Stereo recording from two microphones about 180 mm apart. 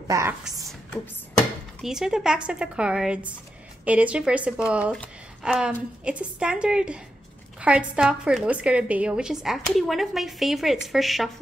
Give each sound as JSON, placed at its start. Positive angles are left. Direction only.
{"t": 0.1, "sound": "speech", "side_deg": -15}
{"t": 1.8, "sound": "a woman's voice", "side_deg": -5}